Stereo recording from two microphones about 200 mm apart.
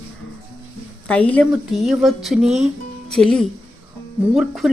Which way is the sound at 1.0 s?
5° left (ahead or behind).